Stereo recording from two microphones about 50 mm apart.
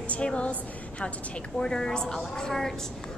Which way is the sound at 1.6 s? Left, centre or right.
Centre.